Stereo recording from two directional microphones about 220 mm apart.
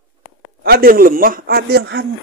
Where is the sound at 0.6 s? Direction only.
40° right (ahead or behind).